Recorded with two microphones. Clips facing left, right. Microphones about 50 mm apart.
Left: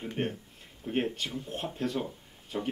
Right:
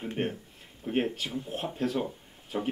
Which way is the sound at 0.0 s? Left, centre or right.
Centre.